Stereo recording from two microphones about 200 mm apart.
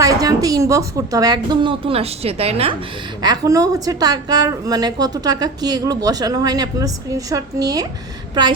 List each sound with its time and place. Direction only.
0.0 s a woman's voice: 15° right (ahead or behind)
3.2 s a woman's voice: 20° right (ahead or behind)